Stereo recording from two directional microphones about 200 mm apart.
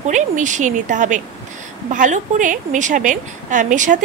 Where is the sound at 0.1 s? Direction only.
40° right (ahead or behind).